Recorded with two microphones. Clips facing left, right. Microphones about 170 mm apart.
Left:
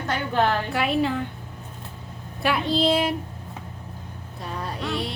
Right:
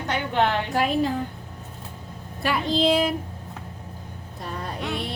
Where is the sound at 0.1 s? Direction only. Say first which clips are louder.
Even; 20° right (ahead or behind).